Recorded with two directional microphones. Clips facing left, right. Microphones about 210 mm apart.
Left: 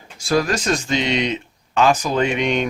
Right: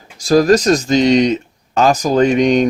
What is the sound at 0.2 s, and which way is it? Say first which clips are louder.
Speech: right 9 dB; 40° right (ahead or behind).